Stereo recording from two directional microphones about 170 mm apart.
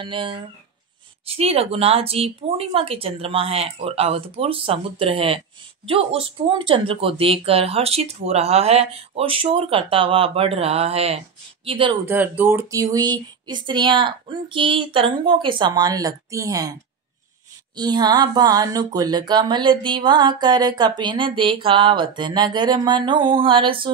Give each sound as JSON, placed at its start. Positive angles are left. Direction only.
{"t": 0.0, "sound": "speech", "side_deg": -30}
{"t": 12.1, "sound": "speech", "side_deg": -10}
{"t": 17.7, "sound": "speech", "side_deg": -25}